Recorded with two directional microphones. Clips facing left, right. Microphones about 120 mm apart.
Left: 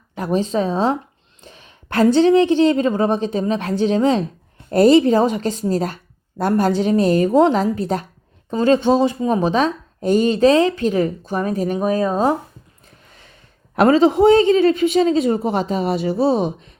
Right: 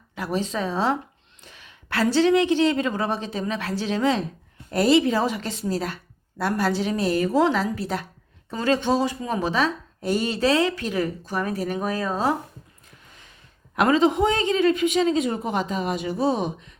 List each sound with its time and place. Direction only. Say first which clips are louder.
0.2 s speech: left 7 dB; 40° left (ahead or behind)
1.5 s a sound: left 3 dB; 40° left (ahead or behind)
2.2 s speech: left 6 dB; 35° left (ahead or behind)
3.9 s speech: left 2 dB; 30° left (ahead or behind)
7.3 s speech: left 6 dB; 30° left (ahead or behind)
8.8 s speech: left 7 dB; 15° left (ahead or behind)
9.5 s speech: left 5 dB; 40° left (ahead or behind)
11.3 s speech: left 6 dB; 20° left (ahead or behind)
13.7 s speech: left 6 dB; 35° left (ahead or behind)